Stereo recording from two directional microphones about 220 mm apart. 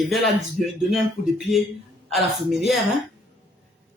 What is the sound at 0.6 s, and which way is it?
Music, 35° left (ahead or behind).